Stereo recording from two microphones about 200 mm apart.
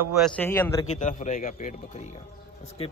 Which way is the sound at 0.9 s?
35° left (ahead or behind).